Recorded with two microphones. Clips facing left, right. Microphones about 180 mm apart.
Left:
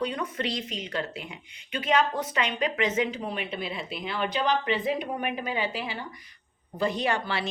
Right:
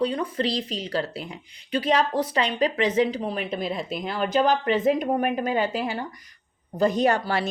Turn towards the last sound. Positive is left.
turn(degrees=-45)  # may be behind; listen again after turning